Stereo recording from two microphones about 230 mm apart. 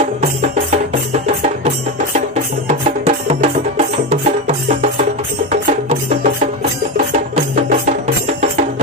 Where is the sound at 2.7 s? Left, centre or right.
Right.